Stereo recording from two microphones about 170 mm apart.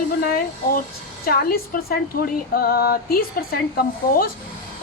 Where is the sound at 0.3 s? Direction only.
60° left (ahead or behind).